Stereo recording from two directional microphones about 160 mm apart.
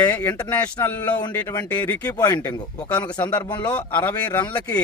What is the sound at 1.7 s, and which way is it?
Speech, 10° left (ahead or behind).